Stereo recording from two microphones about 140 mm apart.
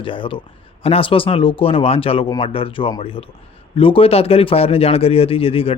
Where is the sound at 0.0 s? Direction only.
40° left (ahead or behind).